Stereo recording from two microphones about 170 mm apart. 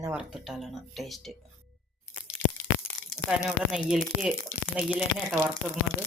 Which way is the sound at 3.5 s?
Centre (ahead or behind).